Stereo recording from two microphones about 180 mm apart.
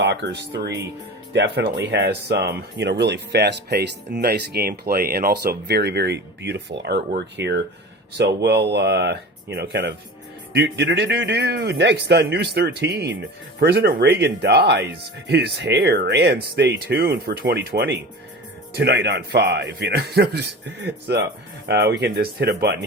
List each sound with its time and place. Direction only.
0.0 s speech: 70° right (ahead or behind)